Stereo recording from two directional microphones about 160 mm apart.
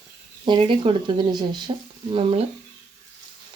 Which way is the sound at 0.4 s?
30° right (ahead or behind).